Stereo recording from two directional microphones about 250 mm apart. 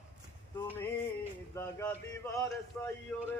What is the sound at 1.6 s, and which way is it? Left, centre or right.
Speech, centre.